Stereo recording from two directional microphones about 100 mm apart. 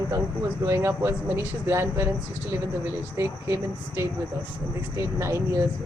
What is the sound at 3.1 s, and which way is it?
A woman's voice, 25° right (ahead or behind).